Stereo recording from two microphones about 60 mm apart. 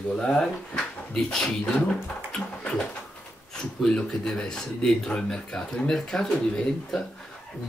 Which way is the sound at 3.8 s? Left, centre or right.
Centre.